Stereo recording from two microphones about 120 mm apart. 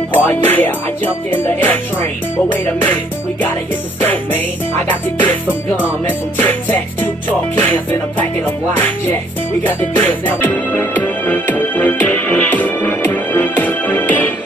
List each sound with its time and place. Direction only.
0.1 s music: 15° left (ahead or behind)
4.0 s music: 15° left (ahead or behind)